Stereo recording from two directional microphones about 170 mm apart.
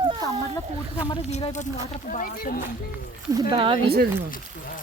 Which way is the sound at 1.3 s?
40° left (ahead or behind).